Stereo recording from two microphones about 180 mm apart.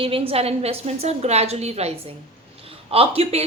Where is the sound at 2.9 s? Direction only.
30° right (ahead or behind).